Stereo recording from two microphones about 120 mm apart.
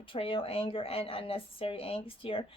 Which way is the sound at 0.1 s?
50° left (ahead or behind).